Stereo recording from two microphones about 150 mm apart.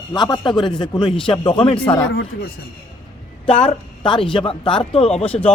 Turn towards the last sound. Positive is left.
turn(degrees=40)  # may be behind; listen again after turning